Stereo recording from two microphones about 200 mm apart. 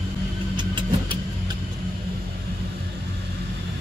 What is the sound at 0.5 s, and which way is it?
Vehicle, 25° right (ahead or behind).